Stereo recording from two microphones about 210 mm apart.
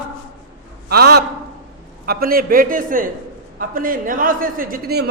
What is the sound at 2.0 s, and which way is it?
A man's voice, 45° right (ahead or behind).